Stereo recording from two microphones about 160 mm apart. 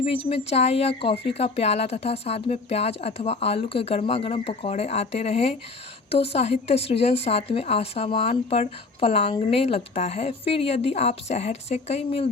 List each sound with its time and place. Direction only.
0.0 s a woman's voice: 40° left (ahead or behind)